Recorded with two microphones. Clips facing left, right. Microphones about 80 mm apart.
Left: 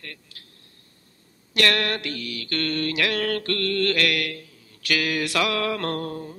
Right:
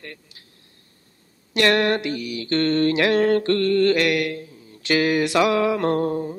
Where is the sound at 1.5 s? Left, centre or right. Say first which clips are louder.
Right 5 dB; right.